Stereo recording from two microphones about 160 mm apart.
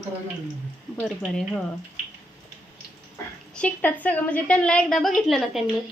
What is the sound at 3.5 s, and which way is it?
A woman's voice, 10° left (ahead or behind).